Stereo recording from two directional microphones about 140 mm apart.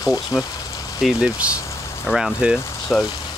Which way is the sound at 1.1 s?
5° right (ahead or behind).